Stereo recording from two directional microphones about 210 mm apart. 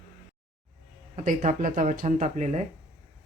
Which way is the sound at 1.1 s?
35° right (ahead or behind).